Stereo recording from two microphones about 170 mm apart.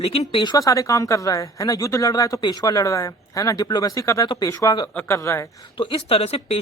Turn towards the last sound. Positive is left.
turn(degrees=35)  # may be behind; listen again after turning